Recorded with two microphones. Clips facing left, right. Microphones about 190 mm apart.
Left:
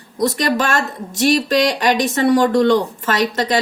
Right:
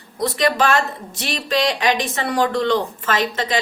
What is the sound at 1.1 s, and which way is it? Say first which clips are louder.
Speech: left 8 dB; 45° left (ahead or behind).